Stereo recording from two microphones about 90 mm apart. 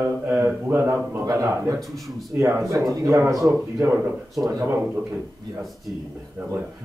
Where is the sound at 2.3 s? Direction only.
20° right (ahead or behind).